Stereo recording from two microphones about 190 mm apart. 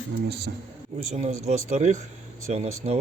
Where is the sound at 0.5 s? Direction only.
55° right (ahead or behind).